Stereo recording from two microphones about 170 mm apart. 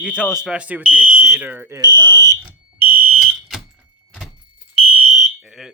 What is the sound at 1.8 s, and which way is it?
Speech, 25° right (ahead or behind).